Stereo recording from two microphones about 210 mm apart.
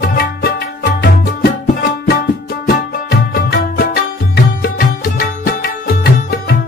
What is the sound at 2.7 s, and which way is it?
Music, 45° left (ahead or behind).